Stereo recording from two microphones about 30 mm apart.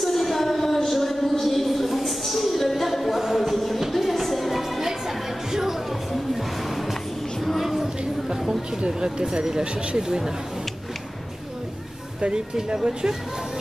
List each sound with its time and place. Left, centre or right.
0.0 s a sound: centre
3.1 s music: centre
3.4 s music: centre
7.6 s a sound: centre
9.0 s speech: right
12.7 s speech: right